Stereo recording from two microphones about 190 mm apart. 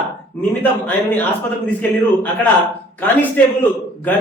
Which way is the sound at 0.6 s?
10° left (ahead or behind).